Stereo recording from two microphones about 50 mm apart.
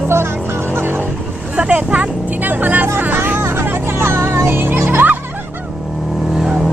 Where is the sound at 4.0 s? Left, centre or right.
Right.